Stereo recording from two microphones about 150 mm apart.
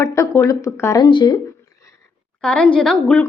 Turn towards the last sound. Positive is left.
turn(degrees=5)  # may be behind; listen again after turning